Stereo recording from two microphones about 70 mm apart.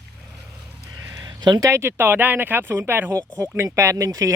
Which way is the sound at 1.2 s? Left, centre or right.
Right.